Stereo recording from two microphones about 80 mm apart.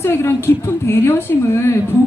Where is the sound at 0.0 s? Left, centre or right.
Left.